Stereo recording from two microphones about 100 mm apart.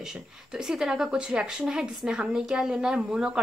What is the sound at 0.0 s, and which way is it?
Speech, 5° right (ahead or behind).